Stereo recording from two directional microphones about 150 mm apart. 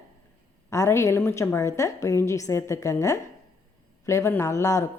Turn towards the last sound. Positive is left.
turn(degrees=20)  # may be behind; listen again after turning